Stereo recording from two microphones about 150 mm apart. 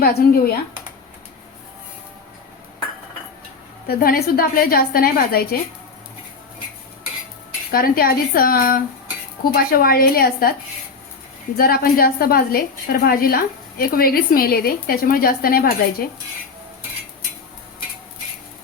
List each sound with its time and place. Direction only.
0.0 s speech: 90° left
3.8 s a woman's voice: 85° left
7.7 s a woman's voice: 75° left (ahead or behind)
11.5 s a woman's voice: 80° left